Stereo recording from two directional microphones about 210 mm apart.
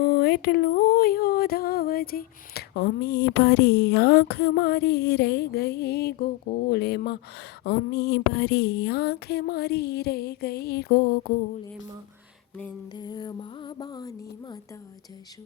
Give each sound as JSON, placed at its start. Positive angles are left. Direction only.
{"t": 0.0, "sound": "speech", "side_deg": 50}
{"t": 12.9, "sound": "music", "side_deg": 20}